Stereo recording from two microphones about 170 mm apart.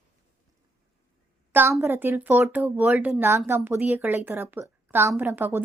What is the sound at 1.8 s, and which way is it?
A woman's voice, 15° right (ahead or behind).